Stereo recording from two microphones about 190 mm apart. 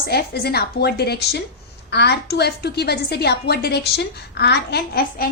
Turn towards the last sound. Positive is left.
turn(degrees=50)  # may be behind; listen again after turning